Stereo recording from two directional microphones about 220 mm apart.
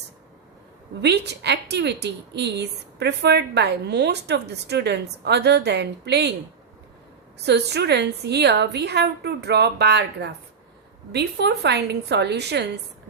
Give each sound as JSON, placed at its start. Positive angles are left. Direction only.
{"t": 1.0, "sound": "a woman's voice", "side_deg": -50}
{"t": 7.4, "sound": "a woman's voice", "side_deg": -50}